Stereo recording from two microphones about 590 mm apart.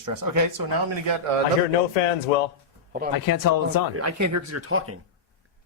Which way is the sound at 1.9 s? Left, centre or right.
Left.